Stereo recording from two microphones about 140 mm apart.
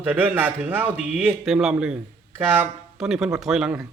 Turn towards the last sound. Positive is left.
turn(degrees=-5)  # may be behind; listen again after turning